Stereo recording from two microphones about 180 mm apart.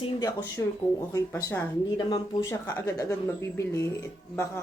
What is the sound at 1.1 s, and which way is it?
Speech, 20° left (ahead or behind).